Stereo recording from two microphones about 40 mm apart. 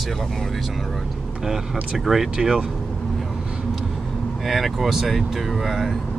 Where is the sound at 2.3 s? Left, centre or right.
Centre.